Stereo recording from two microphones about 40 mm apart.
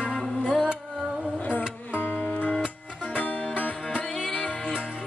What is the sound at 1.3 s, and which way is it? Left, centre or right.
Music, left.